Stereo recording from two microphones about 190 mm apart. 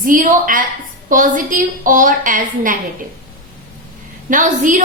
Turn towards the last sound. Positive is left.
turn(degrees=-45)  # may be behind; listen again after turning